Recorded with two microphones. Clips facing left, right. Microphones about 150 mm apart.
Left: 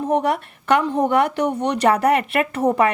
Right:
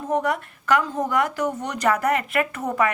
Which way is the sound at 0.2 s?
30° left (ahead or behind).